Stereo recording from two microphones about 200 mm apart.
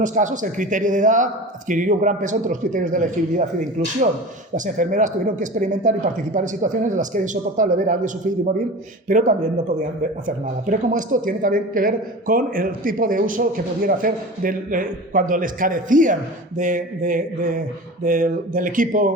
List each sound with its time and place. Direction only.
0.0 s a man's voice: 40° right (ahead or behind)
4.5 s a man's voice: 40° right (ahead or behind)